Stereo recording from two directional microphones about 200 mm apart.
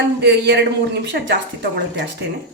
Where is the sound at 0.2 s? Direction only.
60° right (ahead or behind).